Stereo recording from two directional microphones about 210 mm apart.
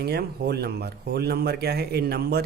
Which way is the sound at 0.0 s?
50° right (ahead or behind).